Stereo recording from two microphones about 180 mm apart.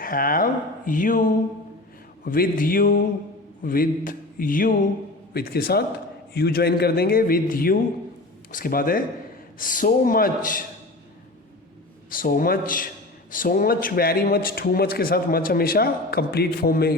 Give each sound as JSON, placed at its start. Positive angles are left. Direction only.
{"t": 0.0, "sound": "a man's voice", "side_deg": 50}
{"t": 12.1, "sound": "a man's voice", "side_deg": 50}